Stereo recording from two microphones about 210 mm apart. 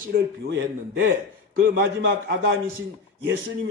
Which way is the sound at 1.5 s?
60° right (ahead or behind).